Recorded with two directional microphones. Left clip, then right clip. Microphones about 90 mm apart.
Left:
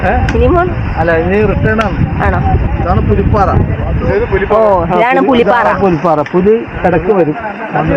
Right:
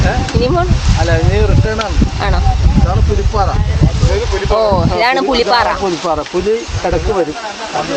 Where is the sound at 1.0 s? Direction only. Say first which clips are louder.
Left 5 dB; 5° left (ahead or behind).